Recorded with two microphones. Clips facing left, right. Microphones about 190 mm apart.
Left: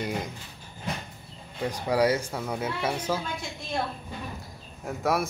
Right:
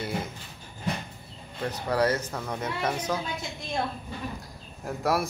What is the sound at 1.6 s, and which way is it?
Speech, 10° left (ahead or behind).